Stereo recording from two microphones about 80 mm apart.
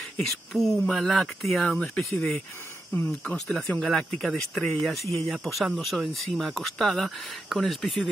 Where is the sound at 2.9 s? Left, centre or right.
Left.